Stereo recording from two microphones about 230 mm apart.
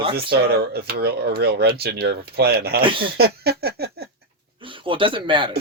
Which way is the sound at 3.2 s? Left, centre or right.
Right.